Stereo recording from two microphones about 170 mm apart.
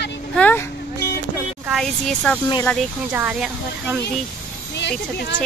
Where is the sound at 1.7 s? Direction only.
Centre (ahead or behind).